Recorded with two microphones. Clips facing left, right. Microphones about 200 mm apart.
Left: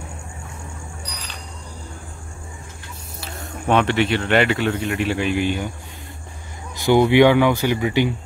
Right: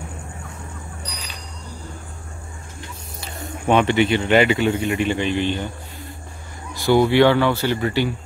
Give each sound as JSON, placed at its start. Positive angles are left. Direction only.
{"t": 3.2, "sound": "speech", "side_deg": 0}
{"t": 6.7, "sound": "speech", "side_deg": 20}